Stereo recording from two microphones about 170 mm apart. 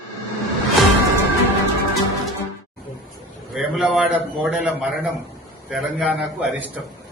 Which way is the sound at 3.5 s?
Centre (ahead or behind).